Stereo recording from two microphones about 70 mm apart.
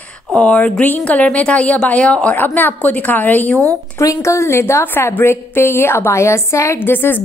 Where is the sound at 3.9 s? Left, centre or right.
Left.